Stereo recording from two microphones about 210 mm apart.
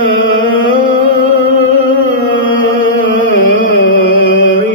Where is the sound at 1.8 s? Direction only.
70° left (ahead or behind).